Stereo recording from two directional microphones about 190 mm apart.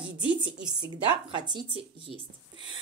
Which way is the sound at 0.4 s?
20° right (ahead or behind).